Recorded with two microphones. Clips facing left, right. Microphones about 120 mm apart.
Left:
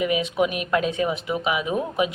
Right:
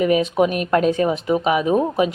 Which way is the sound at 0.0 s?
40° right (ahead or behind).